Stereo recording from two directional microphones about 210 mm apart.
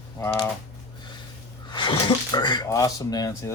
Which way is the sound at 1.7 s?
25° left (ahead or behind).